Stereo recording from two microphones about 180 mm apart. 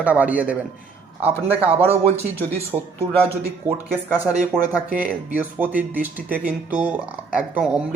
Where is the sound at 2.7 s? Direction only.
20° right (ahead or behind).